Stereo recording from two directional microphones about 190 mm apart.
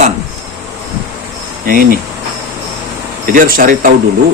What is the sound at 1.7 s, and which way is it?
Speech, 50° right (ahead or behind).